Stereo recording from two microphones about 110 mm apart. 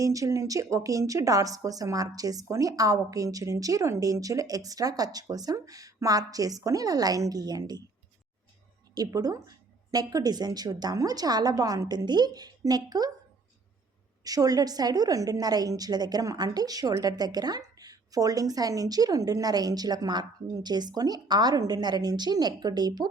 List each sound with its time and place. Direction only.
0.0 s a woman's voice: 30° right (ahead or behind)
9.0 s a woman's voice: 35° right (ahead or behind)
14.3 s a woman's voice: 35° right (ahead or behind)